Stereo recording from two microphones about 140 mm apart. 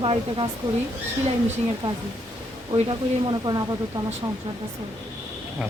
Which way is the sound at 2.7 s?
35° right (ahead or behind).